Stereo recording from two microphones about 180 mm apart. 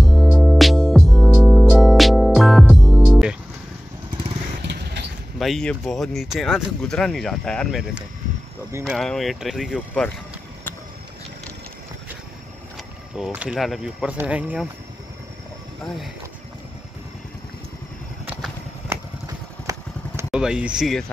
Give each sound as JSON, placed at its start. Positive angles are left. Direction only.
{"t": 0.0, "sound": "music", "side_deg": 0}
{"t": 5.4, "sound": "speech", "side_deg": 0}
{"t": 13.2, "sound": "speech", "side_deg": -5}
{"t": 15.8, "sound": "speech", "side_deg": 0}
{"t": 18.9, "sound": "vehicle", "side_deg": -20}
{"t": 20.2, "sound": "speech", "side_deg": -5}